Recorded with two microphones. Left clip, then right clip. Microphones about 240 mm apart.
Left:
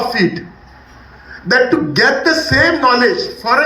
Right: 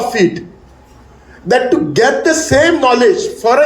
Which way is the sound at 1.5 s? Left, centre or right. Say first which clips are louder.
Right 1 dB; right.